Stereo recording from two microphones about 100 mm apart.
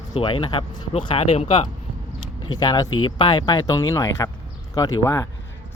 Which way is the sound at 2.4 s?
45° left (ahead or behind).